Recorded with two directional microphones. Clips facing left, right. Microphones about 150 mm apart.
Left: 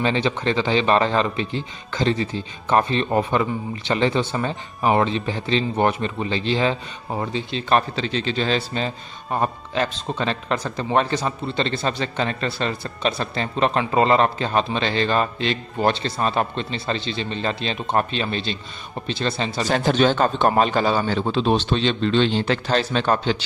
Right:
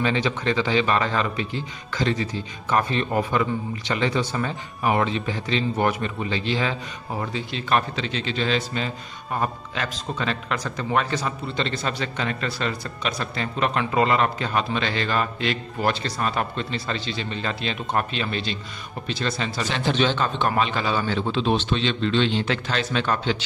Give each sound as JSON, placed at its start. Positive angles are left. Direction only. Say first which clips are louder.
{"t": 0.0, "sound": "speech", "louder": "left 2 dB", "side_deg": 30}
{"t": 19.7, "sound": "a man's voice", "louder": "left 5 dB", "side_deg": 45}